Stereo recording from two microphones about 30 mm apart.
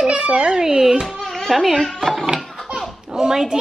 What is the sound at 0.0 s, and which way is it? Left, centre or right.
A child's voice, right.